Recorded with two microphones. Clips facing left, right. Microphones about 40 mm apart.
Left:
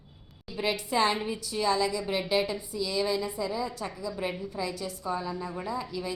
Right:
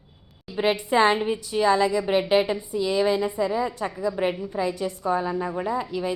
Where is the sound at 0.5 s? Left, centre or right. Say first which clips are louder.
Right 7 dB; right.